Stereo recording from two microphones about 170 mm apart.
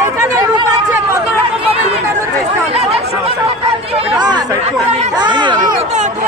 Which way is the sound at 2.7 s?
35° right (ahead or behind).